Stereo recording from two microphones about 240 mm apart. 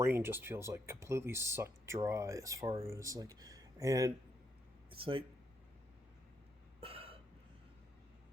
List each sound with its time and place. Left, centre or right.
0.0 s speech: centre
6.7 s hiccup: right